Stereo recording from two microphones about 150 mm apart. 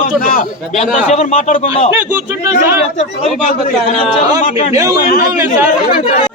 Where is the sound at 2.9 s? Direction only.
50° left (ahead or behind).